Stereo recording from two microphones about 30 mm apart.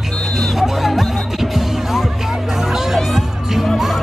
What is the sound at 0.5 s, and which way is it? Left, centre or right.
Music, centre.